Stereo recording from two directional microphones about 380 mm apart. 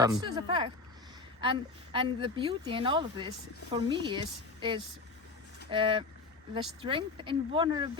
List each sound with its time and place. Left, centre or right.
0.0 s a woman's voice: centre